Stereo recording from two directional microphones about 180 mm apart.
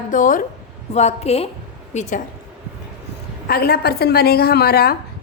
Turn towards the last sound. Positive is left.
turn(degrees=60)  # may be behind; listen again after turning